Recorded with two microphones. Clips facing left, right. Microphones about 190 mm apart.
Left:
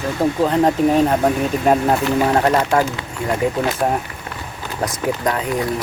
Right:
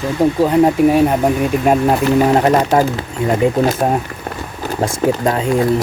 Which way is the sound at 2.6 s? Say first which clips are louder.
Right 4 dB; 40° right (ahead or behind).